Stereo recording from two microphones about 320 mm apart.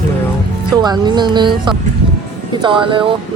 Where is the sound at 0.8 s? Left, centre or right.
Centre.